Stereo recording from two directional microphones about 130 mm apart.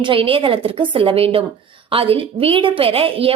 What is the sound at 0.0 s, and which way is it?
A woman's voice, 40° right (ahead or behind).